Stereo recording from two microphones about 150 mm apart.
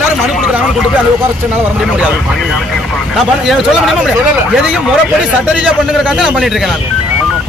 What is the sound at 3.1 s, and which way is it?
Speech, centre (ahead or behind).